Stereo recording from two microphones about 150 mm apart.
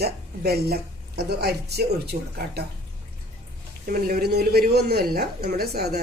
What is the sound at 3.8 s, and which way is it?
A woman's voice, 75° right (ahead or behind).